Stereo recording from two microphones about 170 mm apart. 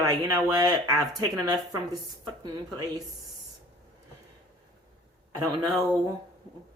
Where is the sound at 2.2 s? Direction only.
25° right (ahead or behind).